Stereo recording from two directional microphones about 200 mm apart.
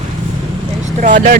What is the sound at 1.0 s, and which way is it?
Speech, 40° right (ahead or behind).